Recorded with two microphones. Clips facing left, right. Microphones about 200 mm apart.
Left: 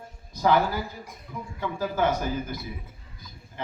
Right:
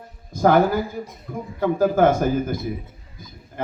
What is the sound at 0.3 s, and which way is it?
A man's voice, 50° right (ahead or behind).